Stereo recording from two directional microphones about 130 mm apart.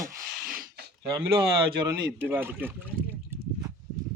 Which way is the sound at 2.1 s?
15° right (ahead or behind).